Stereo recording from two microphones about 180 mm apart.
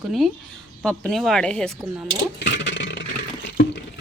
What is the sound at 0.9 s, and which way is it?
Speech, 5° left (ahead or behind).